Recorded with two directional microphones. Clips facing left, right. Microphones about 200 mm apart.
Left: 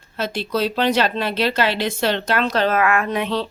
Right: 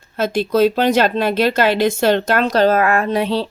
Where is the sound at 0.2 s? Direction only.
45° right (ahead or behind).